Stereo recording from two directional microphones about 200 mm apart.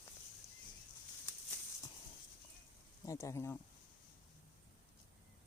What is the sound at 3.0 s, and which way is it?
Speech, 15° left (ahead or behind).